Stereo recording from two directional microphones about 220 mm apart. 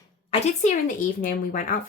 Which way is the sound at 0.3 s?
30° left (ahead or behind).